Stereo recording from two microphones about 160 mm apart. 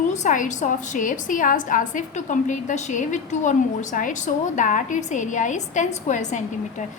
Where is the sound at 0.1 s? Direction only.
50° left (ahead or behind).